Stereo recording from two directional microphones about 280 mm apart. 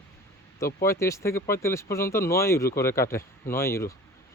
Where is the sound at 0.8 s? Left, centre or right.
Centre.